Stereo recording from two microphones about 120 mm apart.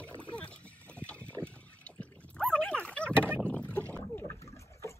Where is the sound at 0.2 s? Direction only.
10° left (ahead or behind).